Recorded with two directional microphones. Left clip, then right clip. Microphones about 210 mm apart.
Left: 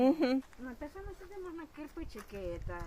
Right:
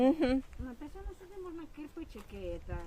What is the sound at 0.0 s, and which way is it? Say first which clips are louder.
Speech: even; 10° right (ahead or behind).